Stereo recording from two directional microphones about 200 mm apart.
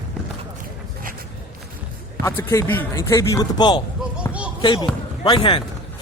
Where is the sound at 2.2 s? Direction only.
15° left (ahead or behind).